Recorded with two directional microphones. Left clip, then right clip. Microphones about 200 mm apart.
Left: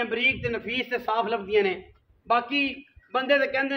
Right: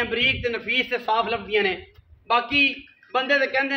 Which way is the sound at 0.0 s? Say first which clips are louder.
Right 3 dB; 30° left (ahead or behind).